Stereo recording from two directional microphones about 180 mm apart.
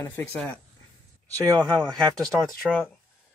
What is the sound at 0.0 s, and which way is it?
Speech, 10° left (ahead or behind).